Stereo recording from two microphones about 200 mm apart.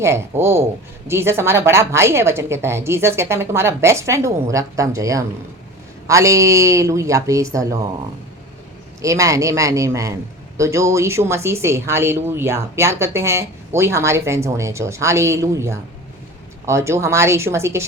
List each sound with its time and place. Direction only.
0.0 s speech: 15° right (ahead or behind)
9.0 s speech: 15° right (ahead or behind)